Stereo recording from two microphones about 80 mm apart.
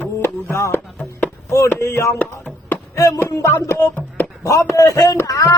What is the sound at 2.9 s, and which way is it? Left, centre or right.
Chopping, left.